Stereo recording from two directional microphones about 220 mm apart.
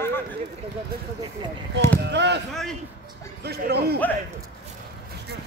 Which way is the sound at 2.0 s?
50° right (ahead or behind).